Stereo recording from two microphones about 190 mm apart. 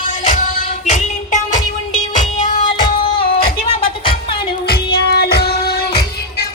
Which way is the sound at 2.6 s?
25° left (ahead or behind).